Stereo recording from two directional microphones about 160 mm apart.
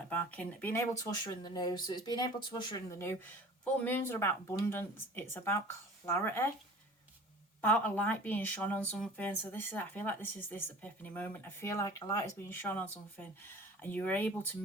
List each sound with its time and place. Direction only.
0.1 s speech: 10° left (ahead or behind); by 3.0 s 25° left (ahead or behind)
3.6 s speech: 10° left (ahead or behind)
7.6 s speech: 10° left (ahead or behind)